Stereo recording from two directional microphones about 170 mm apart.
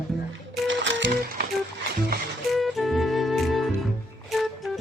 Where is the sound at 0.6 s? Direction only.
90° right.